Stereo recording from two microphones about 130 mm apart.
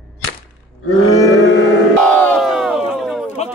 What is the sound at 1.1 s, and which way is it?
Speech, 25° left (ahead or behind).